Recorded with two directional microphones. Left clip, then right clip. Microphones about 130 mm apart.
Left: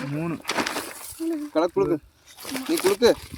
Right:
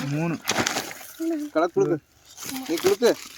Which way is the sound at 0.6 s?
20° right (ahead or behind).